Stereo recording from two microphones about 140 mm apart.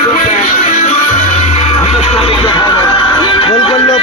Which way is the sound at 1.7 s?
55° left (ahead or behind).